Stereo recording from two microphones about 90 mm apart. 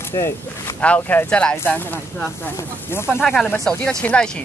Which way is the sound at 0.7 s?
15° left (ahead or behind).